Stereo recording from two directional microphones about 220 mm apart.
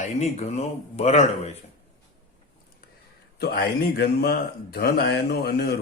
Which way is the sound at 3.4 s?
45° left (ahead or behind).